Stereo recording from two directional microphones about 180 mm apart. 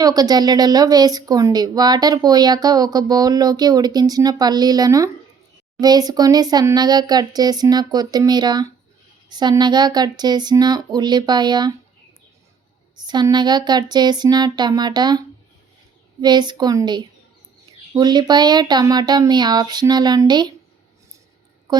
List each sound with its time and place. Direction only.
0.0 s a woman's voice: 20° right (ahead or behind)
13.0 s a woman's voice: 25° right (ahead or behind)
16.2 s a woman's voice: 25° right (ahead or behind)
21.7 s a sound: 25° right (ahead or behind)